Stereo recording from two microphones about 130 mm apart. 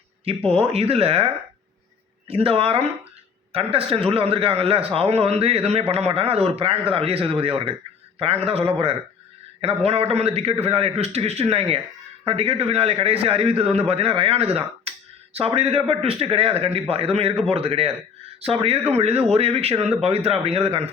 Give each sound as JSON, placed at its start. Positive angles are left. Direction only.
{"t": 0.3, "sound": "a man's voice", "side_deg": -50}